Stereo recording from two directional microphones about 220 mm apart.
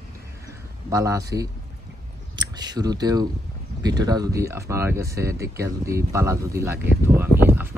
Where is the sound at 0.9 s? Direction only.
15° right (ahead or behind).